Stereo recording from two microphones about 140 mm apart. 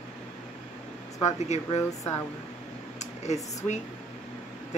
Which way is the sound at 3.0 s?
50° left (ahead or behind).